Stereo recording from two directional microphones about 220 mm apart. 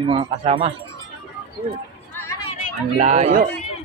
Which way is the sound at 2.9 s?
30° right (ahead or behind).